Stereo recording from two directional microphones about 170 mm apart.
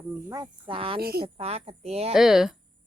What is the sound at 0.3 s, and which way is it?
Speech, 20° right (ahead or behind).